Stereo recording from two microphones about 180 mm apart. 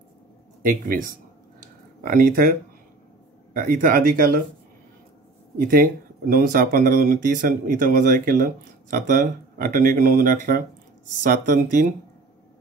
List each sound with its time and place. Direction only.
0.7 s speech: 50° right (ahead or behind)
3.5 s speech: 50° right (ahead or behind)
5.6 s speech: 50° right (ahead or behind)